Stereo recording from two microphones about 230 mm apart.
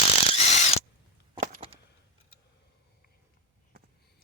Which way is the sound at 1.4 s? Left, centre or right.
Right.